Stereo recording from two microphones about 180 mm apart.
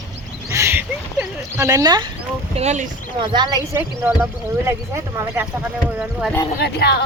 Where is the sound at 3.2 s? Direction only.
25° right (ahead or behind).